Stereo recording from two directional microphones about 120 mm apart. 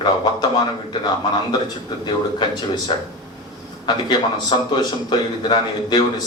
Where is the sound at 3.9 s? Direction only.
40° left (ahead or behind).